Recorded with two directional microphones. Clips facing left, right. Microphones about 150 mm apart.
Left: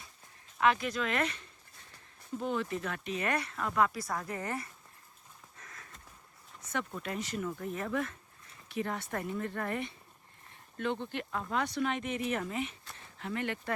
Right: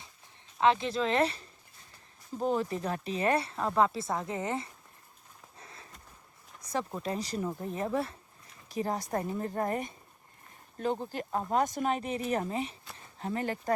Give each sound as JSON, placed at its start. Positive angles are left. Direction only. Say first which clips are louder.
{"t": 0.6, "sound": "speech", "louder": "right 3 dB", "side_deg": -30}
{"t": 5.5, "sound": "a sound", "louder": "right 3 dB", "side_deg": -30}
{"t": 6.6, "sound": "speech", "louder": "right 3 dB", "side_deg": -35}